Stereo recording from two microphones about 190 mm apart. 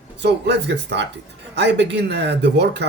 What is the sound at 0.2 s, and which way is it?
Speech, 65° right (ahead or behind).